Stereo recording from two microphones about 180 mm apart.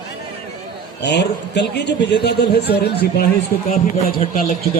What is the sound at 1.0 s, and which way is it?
A man's voice, 70° left (ahead or behind).